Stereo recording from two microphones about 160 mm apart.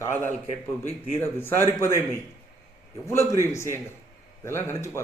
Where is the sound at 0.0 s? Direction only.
15° left (ahead or behind).